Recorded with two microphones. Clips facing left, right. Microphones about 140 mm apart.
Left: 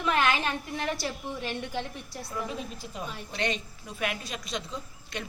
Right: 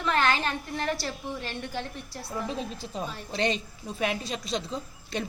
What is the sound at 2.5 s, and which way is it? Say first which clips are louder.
Speech: right 3 dB; 30° right (ahead or behind).